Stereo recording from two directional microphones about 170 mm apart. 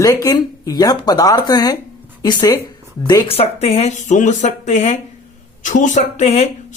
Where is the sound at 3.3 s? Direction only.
35° left (ahead or behind).